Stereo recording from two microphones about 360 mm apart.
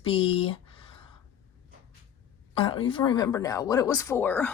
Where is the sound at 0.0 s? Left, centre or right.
Centre.